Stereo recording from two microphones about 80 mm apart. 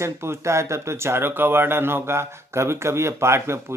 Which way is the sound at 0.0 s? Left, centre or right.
Right.